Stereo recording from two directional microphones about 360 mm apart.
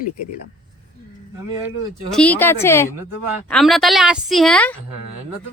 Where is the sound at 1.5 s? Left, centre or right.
Centre.